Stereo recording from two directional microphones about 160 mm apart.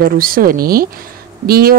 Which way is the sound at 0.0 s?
65° right (ahead or behind).